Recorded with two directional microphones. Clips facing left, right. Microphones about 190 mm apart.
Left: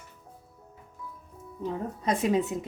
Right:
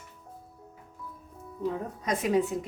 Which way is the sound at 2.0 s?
25° left (ahead or behind).